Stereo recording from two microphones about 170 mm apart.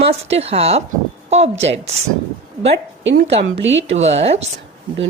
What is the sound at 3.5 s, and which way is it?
Speech, 90° right.